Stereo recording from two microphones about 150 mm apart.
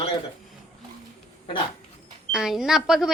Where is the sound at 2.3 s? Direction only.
5° right (ahead or behind).